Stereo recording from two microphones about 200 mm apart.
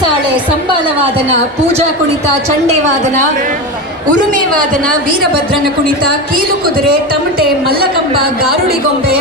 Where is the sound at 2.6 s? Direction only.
35° right (ahead or behind).